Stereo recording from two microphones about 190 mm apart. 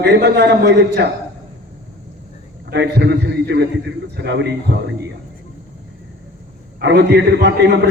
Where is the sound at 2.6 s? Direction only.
60° right (ahead or behind).